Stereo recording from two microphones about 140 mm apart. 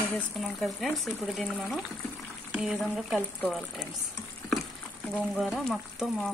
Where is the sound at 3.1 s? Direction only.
10° left (ahead or behind).